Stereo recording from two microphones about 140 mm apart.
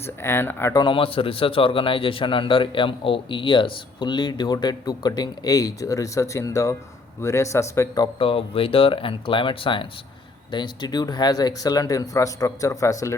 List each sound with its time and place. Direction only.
0.2 s speech: 15° left (ahead or behind)
0.8 s a man's voice: 35° left (ahead or behind)
8.2 s a man's voice: 40° left (ahead or behind); by 13.1 s 20° left (ahead or behind)